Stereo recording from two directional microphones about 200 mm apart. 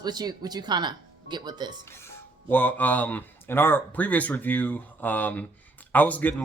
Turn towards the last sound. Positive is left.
turn(degrees=10)  # may be behind; listen again after turning